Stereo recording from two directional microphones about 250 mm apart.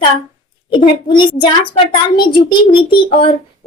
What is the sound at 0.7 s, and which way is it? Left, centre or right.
A child's voice, centre.